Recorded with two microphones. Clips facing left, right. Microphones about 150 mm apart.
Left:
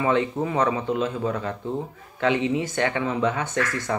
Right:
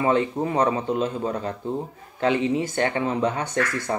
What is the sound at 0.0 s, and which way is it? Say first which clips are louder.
Speech: right 1 dB; 35° right (ahead or behind).